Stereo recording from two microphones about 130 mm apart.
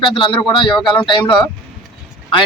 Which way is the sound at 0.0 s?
40° left (ahead or behind).